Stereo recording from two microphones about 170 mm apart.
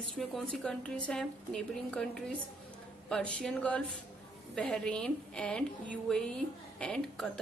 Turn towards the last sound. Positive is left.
turn(degrees=5)  # may be behind; listen again after turning